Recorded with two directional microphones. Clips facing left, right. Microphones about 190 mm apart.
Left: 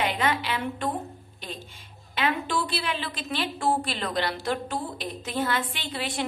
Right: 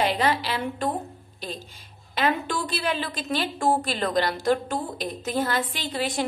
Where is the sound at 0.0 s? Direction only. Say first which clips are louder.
Right 3 dB; 35° right (ahead or behind).